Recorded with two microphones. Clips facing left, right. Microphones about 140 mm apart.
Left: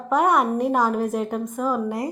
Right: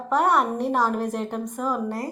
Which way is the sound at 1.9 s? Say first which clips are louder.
Left 3 dB; 20° left (ahead or behind).